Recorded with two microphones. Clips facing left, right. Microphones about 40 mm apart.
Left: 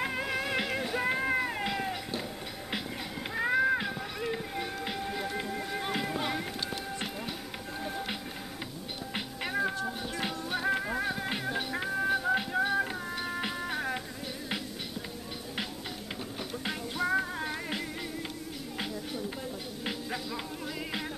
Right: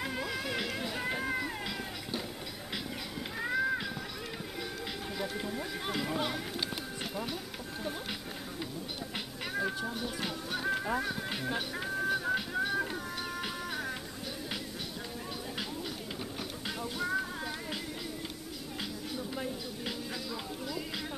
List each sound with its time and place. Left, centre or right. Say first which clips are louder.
0.0 s music: left 4 dB; left
1.2 s cat: left 5 dB; left
3.3 s music: left 5 dB; left
5.2 s run: left 2 dB; centre
5.7 s a sound: left 3 dB; centre
6.0 s clip-clop: left 1 dB; centre
9.1 s music: left 5 dB; centre
16.6 s music: left 4 dB; left